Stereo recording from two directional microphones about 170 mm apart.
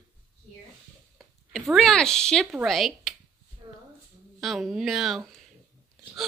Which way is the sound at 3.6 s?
25° right (ahead or behind).